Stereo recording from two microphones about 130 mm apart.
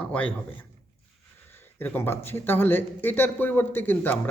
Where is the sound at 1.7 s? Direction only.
15° left (ahead or behind).